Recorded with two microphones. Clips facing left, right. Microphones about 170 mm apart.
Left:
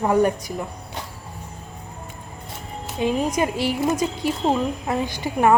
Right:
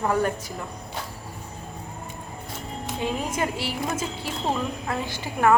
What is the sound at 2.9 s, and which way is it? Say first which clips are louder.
A woman's voice: left 6 dB; 15° left (ahead or behind).